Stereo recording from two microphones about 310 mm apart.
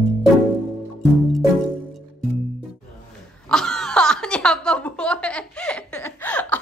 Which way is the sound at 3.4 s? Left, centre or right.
Centre.